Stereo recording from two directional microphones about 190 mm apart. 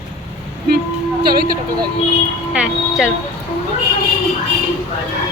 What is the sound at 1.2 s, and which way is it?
Speech, 50° right (ahead or behind).